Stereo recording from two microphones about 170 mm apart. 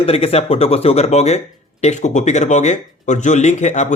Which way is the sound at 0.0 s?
35° left (ahead or behind).